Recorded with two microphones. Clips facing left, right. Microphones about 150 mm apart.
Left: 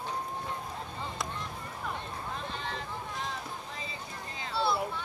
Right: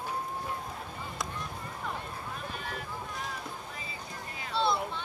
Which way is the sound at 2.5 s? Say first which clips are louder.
Left 1 dB; 25° left (ahead or behind).